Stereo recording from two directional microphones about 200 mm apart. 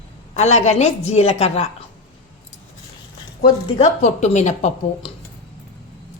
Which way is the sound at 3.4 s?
35° left (ahead or behind).